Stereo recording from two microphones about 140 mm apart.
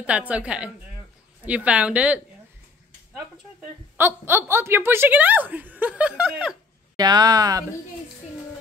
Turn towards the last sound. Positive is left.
turn(degrees=-25)  # may be behind; listen again after turning